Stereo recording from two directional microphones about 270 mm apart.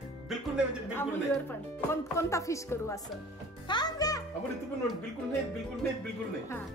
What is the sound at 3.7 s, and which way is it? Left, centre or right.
Music, centre.